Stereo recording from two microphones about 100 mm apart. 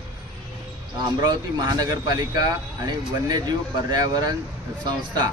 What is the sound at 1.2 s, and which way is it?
Speech, 40° right (ahead or behind).